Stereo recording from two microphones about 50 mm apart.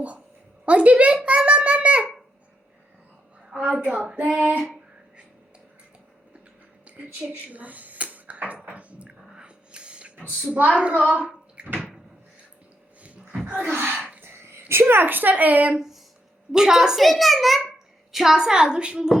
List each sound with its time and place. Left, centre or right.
0.6 s a woman's voice: right
1.2 s a sound: right
3.5 s a woman's voice: right
4.1 s child singing: right
6.8 s a sound: right
10.2 s speech: right
13.4 s a sound: right
13.7 s speech: right
16.6 s a woman's voice: centre
17.0 s a child's voice: centre